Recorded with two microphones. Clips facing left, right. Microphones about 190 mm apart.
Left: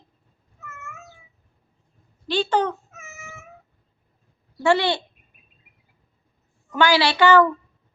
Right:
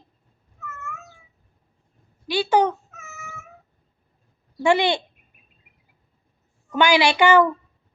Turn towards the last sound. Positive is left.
turn(degrees=-15)  # may be behind; listen again after turning